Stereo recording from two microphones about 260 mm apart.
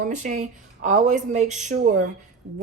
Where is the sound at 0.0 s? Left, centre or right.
Right.